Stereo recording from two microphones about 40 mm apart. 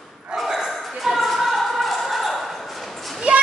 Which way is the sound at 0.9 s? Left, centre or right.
Centre.